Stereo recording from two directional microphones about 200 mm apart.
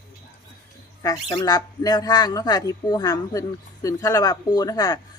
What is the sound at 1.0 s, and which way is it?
A woman's voice, 20° left (ahead or behind).